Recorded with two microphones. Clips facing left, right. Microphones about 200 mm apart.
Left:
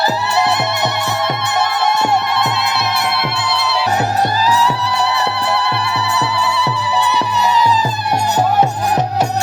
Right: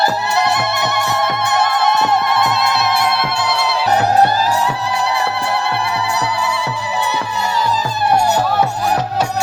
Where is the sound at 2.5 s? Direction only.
45° right (ahead or behind).